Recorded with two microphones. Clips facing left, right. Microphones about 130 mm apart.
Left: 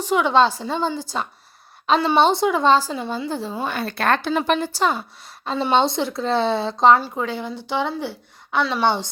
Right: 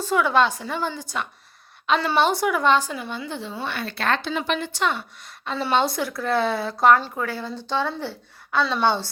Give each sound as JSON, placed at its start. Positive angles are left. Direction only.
{"t": 0.0, "sound": "speech", "side_deg": 20}
{"t": 2.1, "sound": "speech", "side_deg": 25}
{"t": 5.5, "sound": "a woman's voice", "side_deg": 25}